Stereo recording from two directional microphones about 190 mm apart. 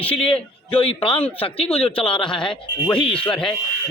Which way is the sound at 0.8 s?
30° left (ahead or behind).